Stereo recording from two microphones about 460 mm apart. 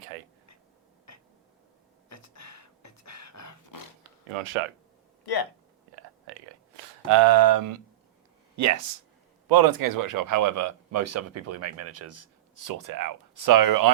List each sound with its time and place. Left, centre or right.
1.1 s a sound: left
2.0 s roar: left
5.2 s speech: left
7.1 s speech: right
9.5 s speech: right